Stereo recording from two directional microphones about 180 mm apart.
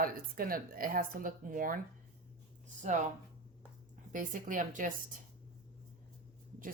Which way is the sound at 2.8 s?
45° right (ahead or behind).